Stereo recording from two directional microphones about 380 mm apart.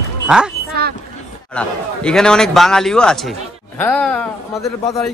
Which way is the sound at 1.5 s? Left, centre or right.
Centre.